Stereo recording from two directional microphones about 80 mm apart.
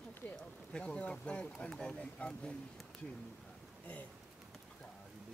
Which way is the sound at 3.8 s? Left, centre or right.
Centre.